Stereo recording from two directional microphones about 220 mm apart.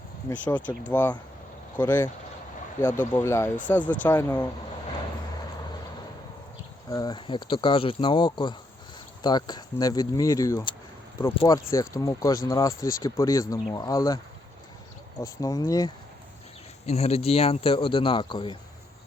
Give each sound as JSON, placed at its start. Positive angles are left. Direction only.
{"t": 0.3, "sound": "speech", "side_deg": 5}
{"t": 6.9, "sound": "a man's voice", "side_deg": 20}
{"t": 15.2, "sound": "speech", "side_deg": 15}
{"t": 16.8, "sound": "a man's voice", "side_deg": 30}